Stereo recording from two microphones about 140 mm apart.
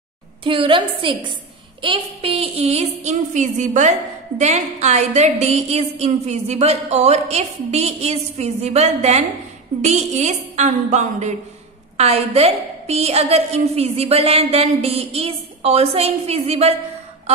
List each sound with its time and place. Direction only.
0.4 s a woman's voice: 40° right (ahead or behind)